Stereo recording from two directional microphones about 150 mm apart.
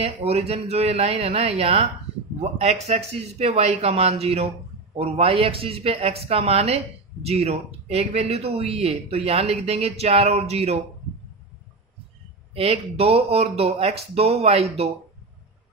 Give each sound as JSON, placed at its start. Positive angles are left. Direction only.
{"t": 0.0, "sound": "a woman's voice", "side_deg": -45}
{"t": 12.5, "sound": "speech", "side_deg": -45}